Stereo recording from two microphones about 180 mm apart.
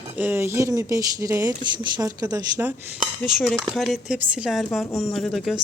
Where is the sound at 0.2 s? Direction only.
10° right (ahead or behind).